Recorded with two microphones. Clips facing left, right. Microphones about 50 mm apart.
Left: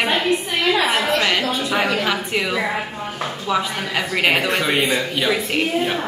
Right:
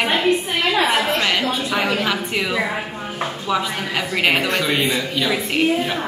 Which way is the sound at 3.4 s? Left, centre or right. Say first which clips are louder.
Left 1 dB; centre.